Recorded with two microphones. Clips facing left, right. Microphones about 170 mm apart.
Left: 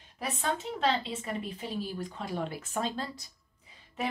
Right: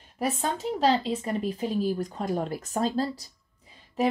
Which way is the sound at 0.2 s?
40° right (ahead or behind).